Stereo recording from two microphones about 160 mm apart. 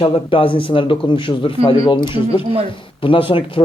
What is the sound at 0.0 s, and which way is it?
Speech, 35° left (ahead or behind).